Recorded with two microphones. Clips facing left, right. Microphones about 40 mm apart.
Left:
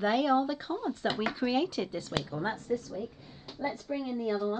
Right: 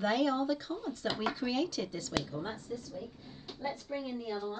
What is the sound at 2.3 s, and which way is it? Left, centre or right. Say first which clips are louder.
Speech: left 6 dB; left.